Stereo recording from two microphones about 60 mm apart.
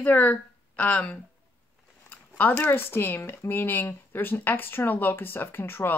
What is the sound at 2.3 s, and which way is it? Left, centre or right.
Speech, left.